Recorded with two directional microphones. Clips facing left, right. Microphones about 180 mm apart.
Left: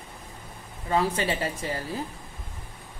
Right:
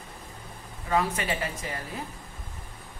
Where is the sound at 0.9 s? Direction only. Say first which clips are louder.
Left 2 dB; 30° left (ahead or behind).